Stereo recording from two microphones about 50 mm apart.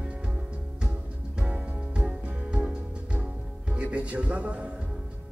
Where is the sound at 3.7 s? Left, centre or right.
Right.